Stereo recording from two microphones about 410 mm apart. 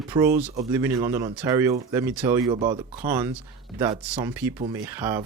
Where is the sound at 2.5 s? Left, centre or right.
Centre.